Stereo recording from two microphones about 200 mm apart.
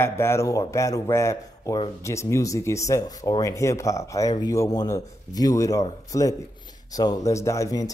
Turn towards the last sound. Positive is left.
turn(degrees=15)  # may be behind; listen again after turning